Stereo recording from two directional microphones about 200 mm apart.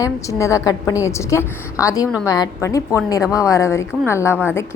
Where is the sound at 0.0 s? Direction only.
15° left (ahead or behind).